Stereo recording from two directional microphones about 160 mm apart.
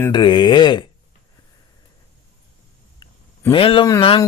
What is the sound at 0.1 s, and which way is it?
Speech, 30° left (ahead or behind).